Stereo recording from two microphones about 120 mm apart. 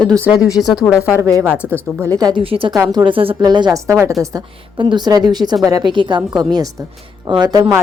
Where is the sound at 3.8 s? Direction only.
25° right (ahead or behind).